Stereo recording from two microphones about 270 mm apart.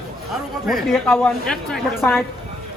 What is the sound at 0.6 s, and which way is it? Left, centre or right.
A woman's voice, centre.